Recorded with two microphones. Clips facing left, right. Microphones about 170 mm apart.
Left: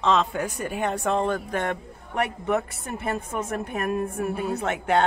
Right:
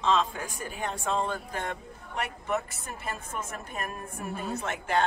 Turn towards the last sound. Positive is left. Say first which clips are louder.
# left 6 dB
turn(degrees=65)  # may be behind; listen again after turning